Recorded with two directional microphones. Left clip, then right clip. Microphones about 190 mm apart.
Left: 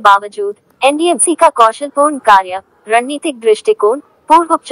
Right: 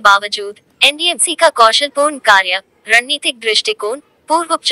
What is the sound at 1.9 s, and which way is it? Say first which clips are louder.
Speech: left 2 dB; 30° right (ahead or behind).